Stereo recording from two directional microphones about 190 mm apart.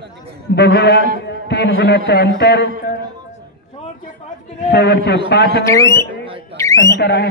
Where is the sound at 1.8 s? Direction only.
60° left (ahead or behind).